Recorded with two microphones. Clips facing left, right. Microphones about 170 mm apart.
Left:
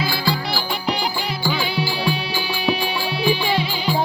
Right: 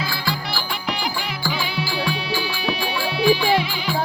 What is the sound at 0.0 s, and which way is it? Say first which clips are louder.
Music: left 4 dB; 30° left (ahead or behind).